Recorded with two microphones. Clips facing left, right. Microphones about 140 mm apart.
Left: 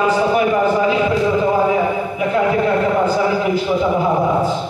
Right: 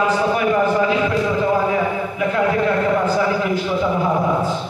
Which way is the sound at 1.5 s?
20° left (ahead or behind).